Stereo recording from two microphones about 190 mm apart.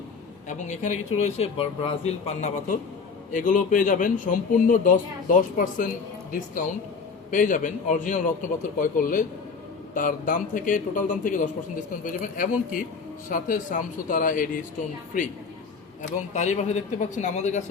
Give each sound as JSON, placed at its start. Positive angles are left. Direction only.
{"t": 0.4, "sound": "speech", "side_deg": 40}